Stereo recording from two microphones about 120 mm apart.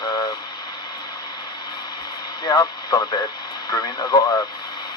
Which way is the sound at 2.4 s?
35° left (ahead or behind).